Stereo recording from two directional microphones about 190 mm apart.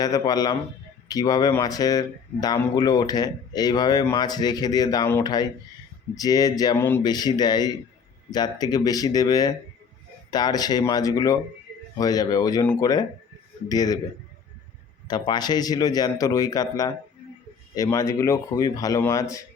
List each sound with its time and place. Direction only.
0.0 s speech: 20° left (ahead or behind)
15.0 s speech: 20° left (ahead or behind)